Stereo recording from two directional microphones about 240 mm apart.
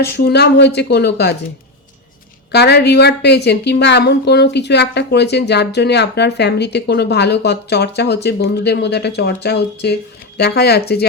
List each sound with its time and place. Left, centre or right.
0.0 s a woman's voice: left
2.5 s a woman's voice: left